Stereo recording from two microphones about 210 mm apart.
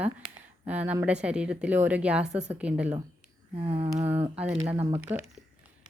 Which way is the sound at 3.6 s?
25° right (ahead or behind).